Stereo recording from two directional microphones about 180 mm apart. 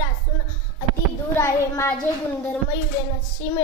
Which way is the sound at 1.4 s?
15° left (ahead or behind).